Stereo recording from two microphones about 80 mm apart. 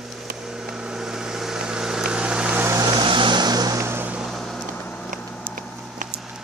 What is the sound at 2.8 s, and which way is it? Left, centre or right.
Vehicle, right.